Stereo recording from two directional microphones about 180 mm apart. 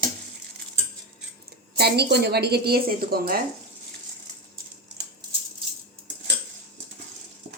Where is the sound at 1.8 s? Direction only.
65° right (ahead or behind).